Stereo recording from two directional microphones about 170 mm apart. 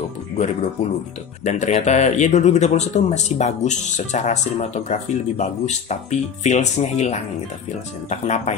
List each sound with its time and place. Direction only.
1.4 s speech: 40° left (ahead or behind)